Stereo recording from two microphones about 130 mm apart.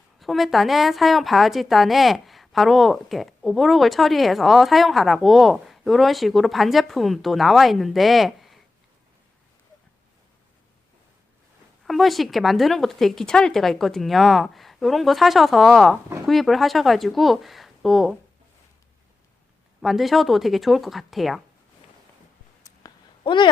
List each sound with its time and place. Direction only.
0.2 s a woman's voice: centre (ahead or behind)
11.9 s a woman's voice: centre (ahead or behind)
19.8 s a woman's voice: centre (ahead or behind)
22.8 s a sound: 30° left (ahead or behind)
23.2 s speech: 40° left (ahead or behind)